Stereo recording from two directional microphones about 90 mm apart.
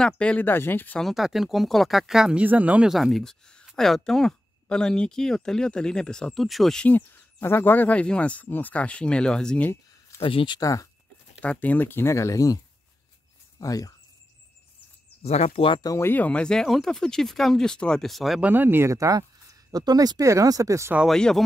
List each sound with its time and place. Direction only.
0.0 s speech: 10° left (ahead or behind)
0.9 s speech: centre (ahead or behind)
2.4 s speech: 15° right (ahead or behind)
2.9 s speech: centre (ahead or behind)
6.9 s speech: 20° left (ahead or behind)
10.2 s speech: 70° left (ahead or behind)
10.6 s speech: 40° left (ahead or behind)
11.4 s speech: 15° left (ahead or behind); by 12.5 s 35° left (ahead or behind)
13.6 s speech: 40° left (ahead or behind)
15.5 s speech: 85° left
16.0 s speech: 20° left (ahead or behind); by 18.4 s centre (ahead or behind)
18.4 s speech: 20° right (ahead or behind); by 20.9 s 35° right (ahead or behind)
21.1 s speech: 5° left (ahead or behind)